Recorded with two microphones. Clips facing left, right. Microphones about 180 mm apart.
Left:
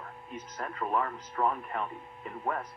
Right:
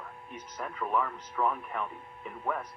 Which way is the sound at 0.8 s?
40° left (ahead or behind).